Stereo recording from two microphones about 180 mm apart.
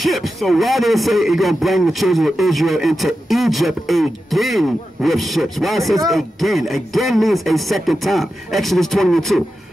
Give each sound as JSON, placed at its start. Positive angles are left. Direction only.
{"t": 0.0, "sound": "speech", "side_deg": 0}